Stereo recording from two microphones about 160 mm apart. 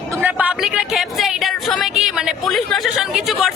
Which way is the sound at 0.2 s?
10° right (ahead or behind).